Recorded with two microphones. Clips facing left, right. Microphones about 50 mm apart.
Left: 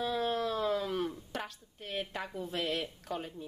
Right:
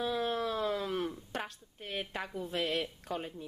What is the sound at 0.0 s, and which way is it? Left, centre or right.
Speech, centre.